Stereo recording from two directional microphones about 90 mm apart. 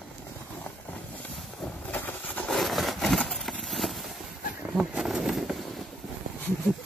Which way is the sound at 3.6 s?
Centre (ahead or behind).